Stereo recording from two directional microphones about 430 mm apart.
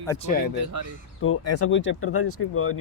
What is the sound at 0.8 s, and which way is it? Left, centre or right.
Speech, right.